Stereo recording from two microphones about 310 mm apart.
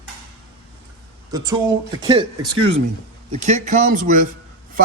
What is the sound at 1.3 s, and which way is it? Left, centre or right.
A man's voice, centre.